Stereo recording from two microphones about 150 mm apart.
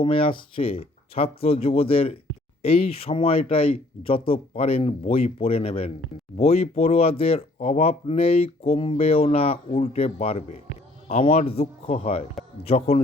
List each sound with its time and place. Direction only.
0.0 s a man's voice: 35° left (ahead or behind)